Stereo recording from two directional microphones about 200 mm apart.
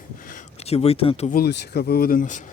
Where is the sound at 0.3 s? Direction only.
35° left (ahead or behind).